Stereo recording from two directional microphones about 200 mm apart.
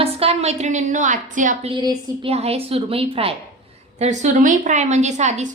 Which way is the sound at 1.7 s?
25° right (ahead or behind).